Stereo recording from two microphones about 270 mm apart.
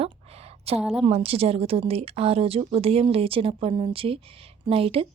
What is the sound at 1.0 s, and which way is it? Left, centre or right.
Speech, right.